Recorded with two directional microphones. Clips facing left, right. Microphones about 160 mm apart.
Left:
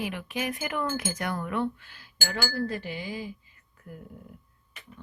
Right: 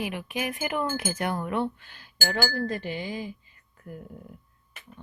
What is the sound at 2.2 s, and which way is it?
Speech, 40° right (ahead or behind).